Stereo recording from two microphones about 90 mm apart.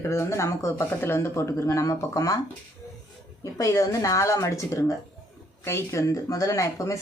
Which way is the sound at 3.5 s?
40° left (ahead or behind).